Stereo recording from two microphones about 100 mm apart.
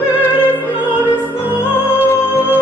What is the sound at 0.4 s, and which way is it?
Opera, 20° left (ahead or behind).